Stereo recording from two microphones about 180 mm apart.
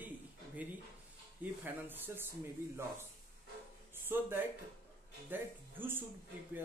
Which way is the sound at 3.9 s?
10° right (ahead or behind).